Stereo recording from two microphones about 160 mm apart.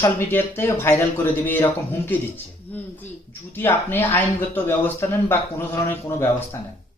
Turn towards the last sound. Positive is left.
turn(degrees=15)  # may be behind; listen again after turning